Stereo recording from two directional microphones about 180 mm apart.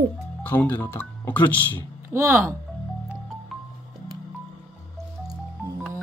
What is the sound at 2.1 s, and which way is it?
Speech, 15° right (ahead or behind).